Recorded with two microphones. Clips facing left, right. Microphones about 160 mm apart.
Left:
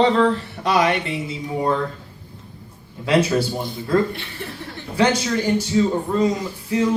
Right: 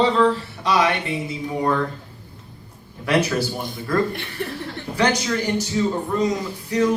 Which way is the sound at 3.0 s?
25° left (ahead or behind).